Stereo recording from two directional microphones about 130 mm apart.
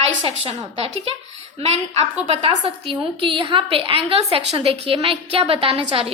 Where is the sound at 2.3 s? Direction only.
45° right (ahead or behind).